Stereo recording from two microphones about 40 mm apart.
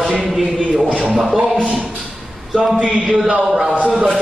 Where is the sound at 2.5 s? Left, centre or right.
Centre.